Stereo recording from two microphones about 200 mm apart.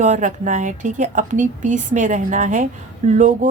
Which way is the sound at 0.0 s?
40° right (ahead or behind).